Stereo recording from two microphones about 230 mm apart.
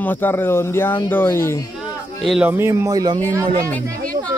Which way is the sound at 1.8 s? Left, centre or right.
Centre.